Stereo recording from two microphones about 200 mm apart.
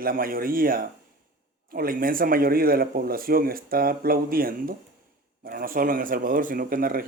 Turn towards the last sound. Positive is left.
turn(degrees=-45)  # may be behind; listen again after turning